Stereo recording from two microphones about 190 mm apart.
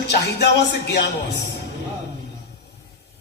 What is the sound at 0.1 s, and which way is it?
A man's voice, 60° left (ahead or behind).